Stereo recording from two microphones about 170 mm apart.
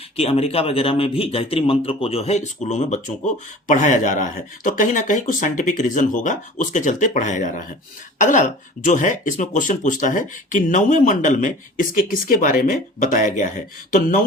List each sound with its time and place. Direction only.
0.2 s a man's voice: 35° left (ahead or behind)